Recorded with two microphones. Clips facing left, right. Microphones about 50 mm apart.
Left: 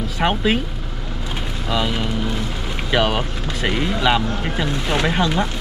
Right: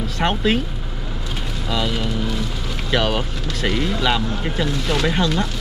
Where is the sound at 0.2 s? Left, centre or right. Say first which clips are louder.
Left 1 dB; centre.